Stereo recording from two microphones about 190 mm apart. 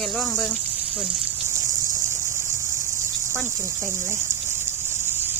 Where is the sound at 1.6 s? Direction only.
15° right (ahead or behind).